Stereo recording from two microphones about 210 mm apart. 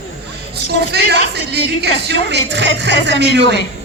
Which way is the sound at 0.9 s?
50° right (ahead or behind).